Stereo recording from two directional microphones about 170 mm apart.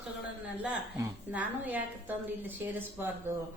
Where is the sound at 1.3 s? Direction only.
10° right (ahead or behind).